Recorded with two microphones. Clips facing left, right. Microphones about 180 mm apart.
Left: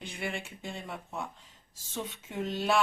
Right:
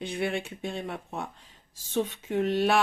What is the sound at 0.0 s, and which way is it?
Speech, 60° right (ahead or behind).